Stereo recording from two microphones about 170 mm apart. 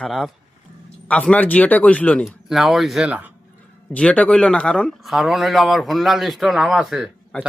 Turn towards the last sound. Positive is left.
turn(degrees=0)  # may be behind; listen again after turning